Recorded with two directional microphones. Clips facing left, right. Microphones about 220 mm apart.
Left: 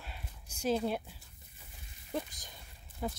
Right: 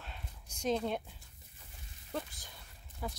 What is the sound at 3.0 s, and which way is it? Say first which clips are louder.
Speech: left 4 dB; 25° left (ahead or behind).